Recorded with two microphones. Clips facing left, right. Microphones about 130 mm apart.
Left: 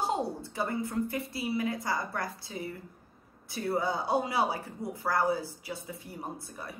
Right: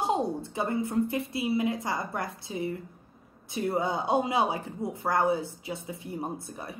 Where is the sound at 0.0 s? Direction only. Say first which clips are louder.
Right 3 dB; 20° right (ahead or behind).